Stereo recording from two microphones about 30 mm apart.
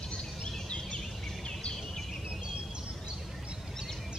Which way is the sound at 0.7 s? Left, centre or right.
Left.